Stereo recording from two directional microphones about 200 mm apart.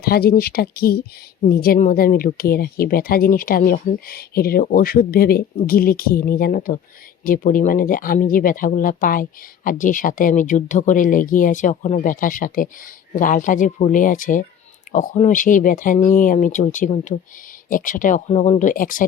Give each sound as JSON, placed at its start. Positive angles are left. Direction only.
{"t": 0.0, "sound": "speech", "side_deg": 50}